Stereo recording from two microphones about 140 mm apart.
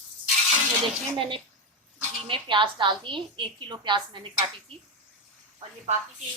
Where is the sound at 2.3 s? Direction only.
35° right (ahead or behind).